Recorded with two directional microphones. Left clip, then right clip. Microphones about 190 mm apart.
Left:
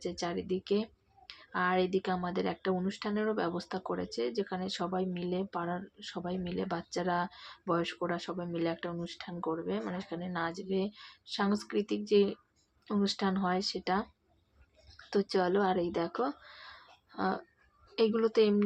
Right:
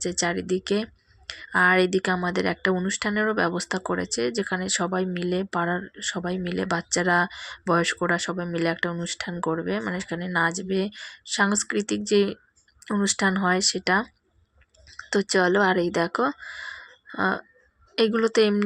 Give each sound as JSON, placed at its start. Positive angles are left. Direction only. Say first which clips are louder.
{"t": 0.0, "sound": "speech", "louder": "right 10 dB", "side_deg": -25}
{"t": 15.1, "sound": "speech", "louder": "right 8 dB", "side_deg": -20}